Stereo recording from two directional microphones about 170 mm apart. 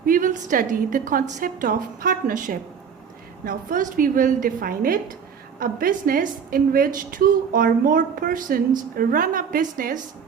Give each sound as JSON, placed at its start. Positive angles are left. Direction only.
{"t": 0.0, "sound": "a woman's voice", "side_deg": -55}